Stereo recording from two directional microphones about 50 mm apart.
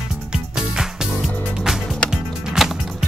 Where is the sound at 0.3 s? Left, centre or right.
Centre.